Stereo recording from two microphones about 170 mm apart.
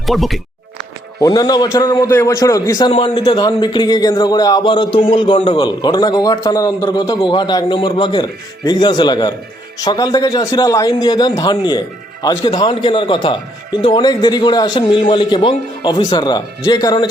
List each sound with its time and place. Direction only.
0.0 s speech: centre (ahead or behind)
1.2 s a man's voice: 20° left (ahead or behind)